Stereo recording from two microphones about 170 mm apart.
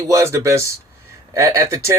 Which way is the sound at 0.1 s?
15° right (ahead or behind).